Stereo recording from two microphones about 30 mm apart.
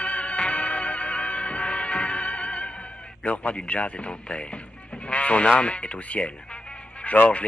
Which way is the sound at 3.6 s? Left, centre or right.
Left.